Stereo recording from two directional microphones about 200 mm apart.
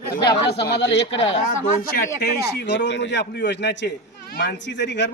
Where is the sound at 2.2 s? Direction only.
55° left (ahead or behind).